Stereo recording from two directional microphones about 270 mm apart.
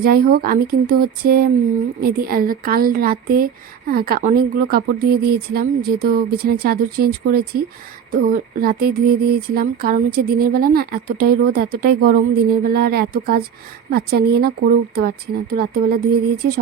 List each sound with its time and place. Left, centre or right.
0.0 s speech: right